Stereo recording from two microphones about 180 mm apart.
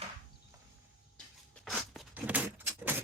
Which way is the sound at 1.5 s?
Centre (ahead or behind).